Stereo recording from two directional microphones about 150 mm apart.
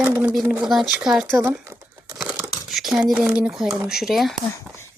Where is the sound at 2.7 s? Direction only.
Centre (ahead or behind).